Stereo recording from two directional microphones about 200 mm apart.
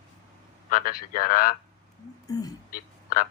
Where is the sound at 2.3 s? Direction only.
20° left (ahead or behind).